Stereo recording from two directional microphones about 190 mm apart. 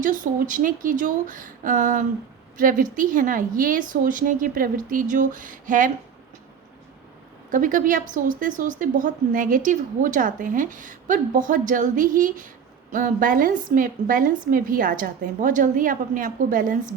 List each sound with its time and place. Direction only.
0.0 s a woman's voice: 45° right (ahead or behind)
7.5 s a woman's voice: 45° right (ahead or behind)